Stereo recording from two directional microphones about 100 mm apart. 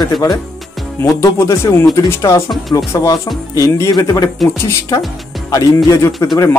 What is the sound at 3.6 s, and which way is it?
Speech, 35° left (ahead or behind).